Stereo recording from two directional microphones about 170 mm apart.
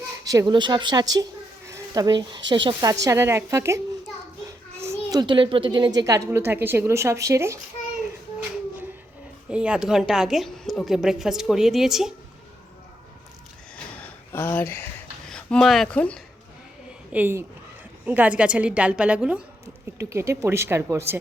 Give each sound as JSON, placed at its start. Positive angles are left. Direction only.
{"t": 0.3, "sound": "a woman's voice", "side_deg": -20}
{"t": 4.8, "sound": "a sound", "side_deg": -15}
{"t": 5.2, "sound": "a woman's voice", "side_deg": -30}
{"t": 9.5, "sound": "a woman's voice", "side_deg": -5}
{"t": 14.3, "sound": "speech", "side_deg": 10}
{"t": 17.1, "sound": "a woman's voice", "side_deg": -10}